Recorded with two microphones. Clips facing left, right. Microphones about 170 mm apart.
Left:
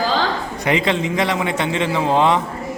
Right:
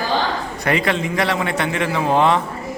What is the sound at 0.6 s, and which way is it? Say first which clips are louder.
A man's voice: left 1 dB; 20° left (ahead or behind).